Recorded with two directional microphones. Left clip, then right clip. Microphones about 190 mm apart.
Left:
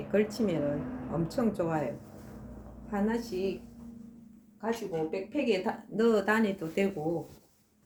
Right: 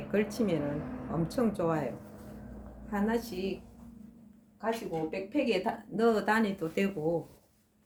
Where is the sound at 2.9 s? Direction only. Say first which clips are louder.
Even; 15° right (ahead or behind).